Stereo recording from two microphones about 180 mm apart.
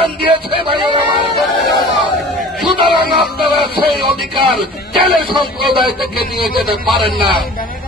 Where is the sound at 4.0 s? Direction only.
30° right (ahead or behind).